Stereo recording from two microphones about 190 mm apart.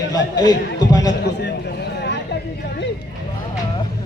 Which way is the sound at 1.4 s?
65° left (ahead or behind).